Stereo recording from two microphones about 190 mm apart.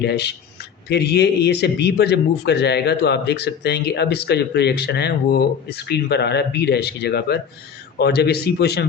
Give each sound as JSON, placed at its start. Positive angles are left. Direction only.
{"t": 0.0, "sound": "a man's voice", "side_deg": 60}